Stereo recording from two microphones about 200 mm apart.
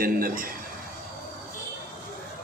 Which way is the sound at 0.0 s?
45° right (ahead or behind).